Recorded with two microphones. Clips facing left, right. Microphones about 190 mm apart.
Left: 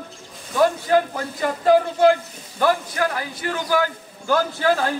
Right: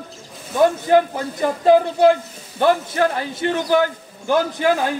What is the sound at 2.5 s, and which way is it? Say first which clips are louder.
A man's voice: right 3 dB; 25° right (ahead or behind).